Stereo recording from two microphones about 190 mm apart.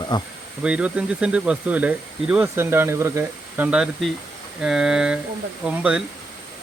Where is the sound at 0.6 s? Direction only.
5° right (ahead or behind).